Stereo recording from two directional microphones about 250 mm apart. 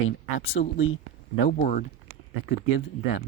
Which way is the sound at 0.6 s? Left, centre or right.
Left.